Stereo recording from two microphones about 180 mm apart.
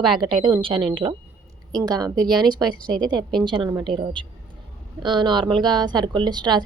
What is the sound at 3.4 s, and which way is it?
A woman's voice, 25° right (ahead or behind).